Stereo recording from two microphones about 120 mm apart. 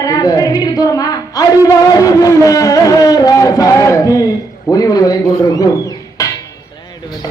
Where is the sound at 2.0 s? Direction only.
30° left (ahead or behind).